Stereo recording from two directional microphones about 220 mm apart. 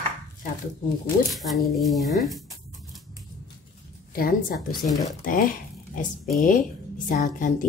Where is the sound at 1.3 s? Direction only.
Centre (ahead or behind).